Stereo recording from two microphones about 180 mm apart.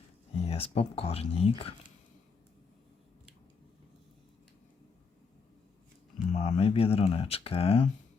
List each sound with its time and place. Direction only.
0.4 s speech: 35° left (ahead or behind)
6.3 s speech: 35° left (ahead or behind)